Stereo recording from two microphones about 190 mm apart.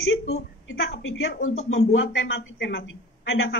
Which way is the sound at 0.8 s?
90° left.